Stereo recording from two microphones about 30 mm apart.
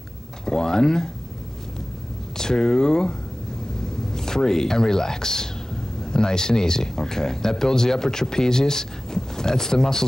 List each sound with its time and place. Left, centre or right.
0.5 s speech: centre
2.3 s speech: centre